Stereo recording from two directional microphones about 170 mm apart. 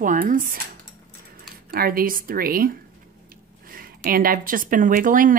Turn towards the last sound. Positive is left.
turn(degrees=-50)  # may be behind; listen again after turning